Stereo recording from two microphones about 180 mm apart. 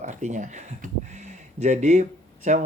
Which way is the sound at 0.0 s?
40° right (ahead or behind).